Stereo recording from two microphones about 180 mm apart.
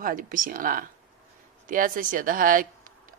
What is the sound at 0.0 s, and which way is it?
Speech, 45° right (ahead or behind).